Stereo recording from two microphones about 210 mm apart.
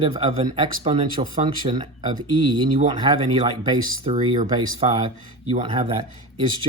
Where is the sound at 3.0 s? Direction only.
20° right (ahead or behind).